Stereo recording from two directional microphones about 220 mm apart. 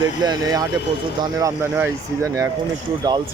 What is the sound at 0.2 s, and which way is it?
Speech, 20° right (ahead or behind).